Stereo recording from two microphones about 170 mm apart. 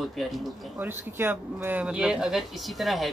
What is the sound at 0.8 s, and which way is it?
Speech, 10° right (ahead or behind).